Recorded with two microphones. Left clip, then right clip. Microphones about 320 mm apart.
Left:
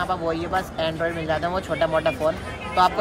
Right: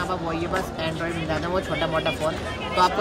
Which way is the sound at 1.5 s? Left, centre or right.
Centre.